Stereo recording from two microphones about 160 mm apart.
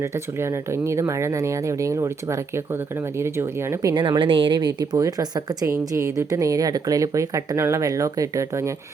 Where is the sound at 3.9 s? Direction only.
30° right (ahead or behind).